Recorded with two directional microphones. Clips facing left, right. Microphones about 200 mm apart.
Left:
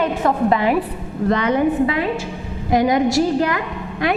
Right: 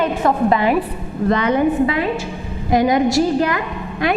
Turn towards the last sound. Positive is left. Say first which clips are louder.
# right 1 dB
turn(degrees=-15)  # may be behind; listen again after turning